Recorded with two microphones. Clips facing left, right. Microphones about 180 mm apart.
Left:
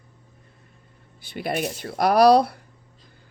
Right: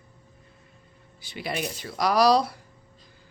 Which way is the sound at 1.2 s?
55° left (ahead or behind).